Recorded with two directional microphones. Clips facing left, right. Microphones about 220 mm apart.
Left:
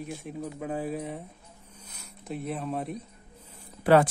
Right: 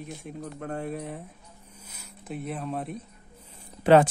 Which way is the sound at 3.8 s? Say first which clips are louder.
Right 2 dB; 20° right (ahead or behind).